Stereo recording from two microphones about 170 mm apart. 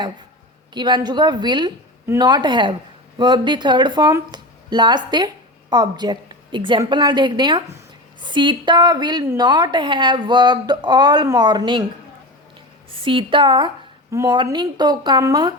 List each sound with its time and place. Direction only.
0.7 s speech: 25° right (ahead or behind)
12.9 s speech: 30° right (ahead or behind)